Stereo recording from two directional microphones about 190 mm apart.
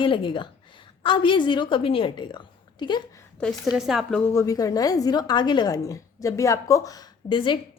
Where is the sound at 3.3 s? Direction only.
Centre (ahead or behind).